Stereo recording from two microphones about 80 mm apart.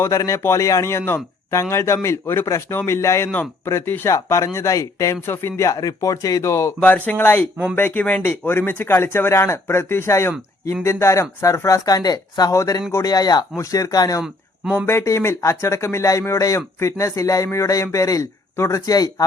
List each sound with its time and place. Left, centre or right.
0.0 s speech: left
5.6 s speech: left
6.8 s speech: left
14.2 s speech: centre
14.8 s speech: left